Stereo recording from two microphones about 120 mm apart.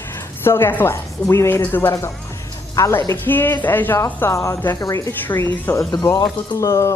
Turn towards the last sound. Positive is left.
turn(degrees=25)  # may be behind; listen again after turning